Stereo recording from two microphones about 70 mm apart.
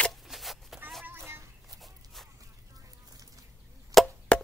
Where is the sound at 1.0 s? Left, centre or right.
Right.